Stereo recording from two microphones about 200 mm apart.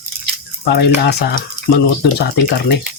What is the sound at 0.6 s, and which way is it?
Speech, 55° left (ahead or behind).